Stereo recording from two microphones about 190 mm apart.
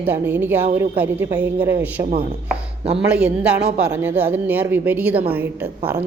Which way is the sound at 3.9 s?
10° right (ahead or behind).